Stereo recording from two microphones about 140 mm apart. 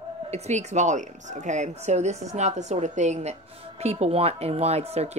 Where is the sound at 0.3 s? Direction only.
55° right (ahead or behind).